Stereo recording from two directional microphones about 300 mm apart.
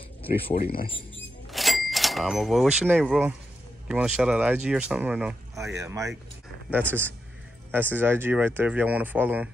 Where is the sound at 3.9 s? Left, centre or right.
Centre.